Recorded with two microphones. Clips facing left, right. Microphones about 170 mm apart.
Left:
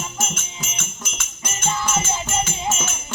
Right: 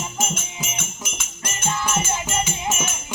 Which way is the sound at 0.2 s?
15° right (ahead or behind).